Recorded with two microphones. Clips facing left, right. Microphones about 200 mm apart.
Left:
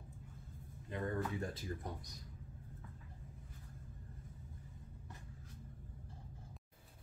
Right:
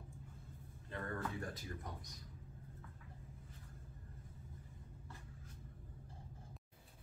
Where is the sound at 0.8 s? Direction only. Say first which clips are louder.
Left 4 dB; 15° left (ahead or behind).